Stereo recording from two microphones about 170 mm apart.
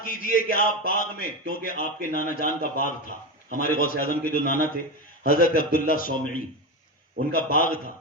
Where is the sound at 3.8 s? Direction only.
55° left (ahead or behind).